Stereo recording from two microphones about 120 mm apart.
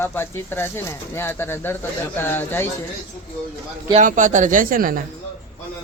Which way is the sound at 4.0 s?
90° right.